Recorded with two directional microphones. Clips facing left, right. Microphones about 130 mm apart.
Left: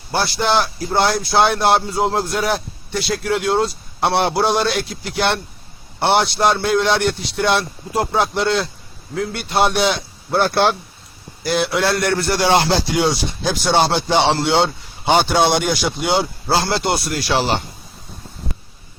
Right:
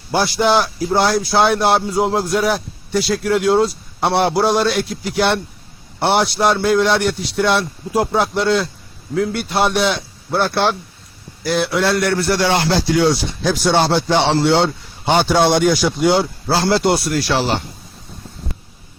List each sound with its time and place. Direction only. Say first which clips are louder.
0.1 s a man's voice: right 3 dB; 10° right (ahead or behind)
12.5 s speech: left 5 dB; 30° left (ahead or behind)
13.4 s speech: right 1 dB; centre (ahead or behind)